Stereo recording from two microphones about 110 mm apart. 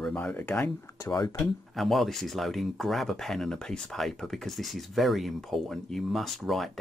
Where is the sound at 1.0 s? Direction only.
30° left (ahead or behind).